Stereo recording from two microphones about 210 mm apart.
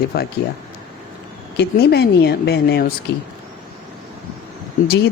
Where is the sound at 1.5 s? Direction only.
50° left (ahead or behind).